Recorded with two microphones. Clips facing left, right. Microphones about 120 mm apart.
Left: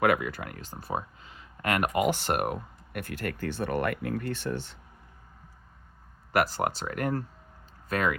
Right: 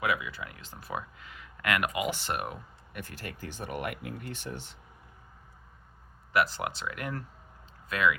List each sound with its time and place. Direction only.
0.0 s speech: 55° left (ahead or behind)
2.1 s speech: 55° left (ahead or behind); by 4.5 s 80° left
6.3 s speech: 45° left (ahead or behind)